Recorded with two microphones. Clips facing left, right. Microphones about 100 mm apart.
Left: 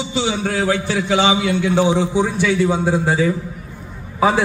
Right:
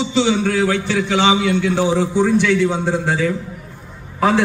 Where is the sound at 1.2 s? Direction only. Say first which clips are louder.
Right 2 dB; 55° right (ahead or behind).